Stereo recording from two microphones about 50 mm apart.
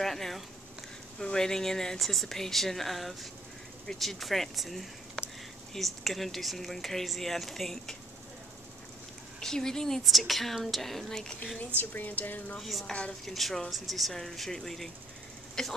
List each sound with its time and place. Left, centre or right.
0.0 s a sound: centre
1.2 s speech: centre
9.4 s speech: centre
11.8 s speech: left
12.5 s speech: centre